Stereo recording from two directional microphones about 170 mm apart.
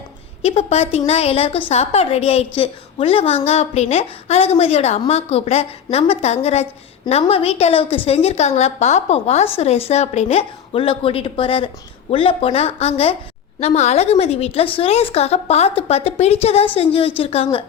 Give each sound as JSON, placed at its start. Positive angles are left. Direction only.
{"t": 0.4, "sound": "a woman's voice", "side_deg": 40}